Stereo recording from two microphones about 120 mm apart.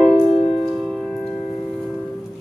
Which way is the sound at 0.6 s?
Centre (ahead or behind).